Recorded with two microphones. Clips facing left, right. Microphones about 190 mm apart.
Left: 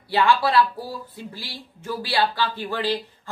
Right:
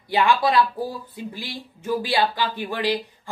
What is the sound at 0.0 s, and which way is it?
Speech, 15° right (ahead or behind).